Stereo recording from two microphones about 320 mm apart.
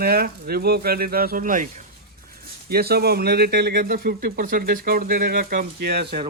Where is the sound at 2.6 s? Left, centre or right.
Right.